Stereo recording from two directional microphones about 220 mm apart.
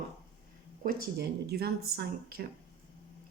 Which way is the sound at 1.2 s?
45° right (ahead or behind).